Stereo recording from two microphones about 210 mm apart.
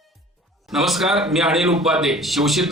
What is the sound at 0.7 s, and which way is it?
A man's voice, centre (ahead or behind).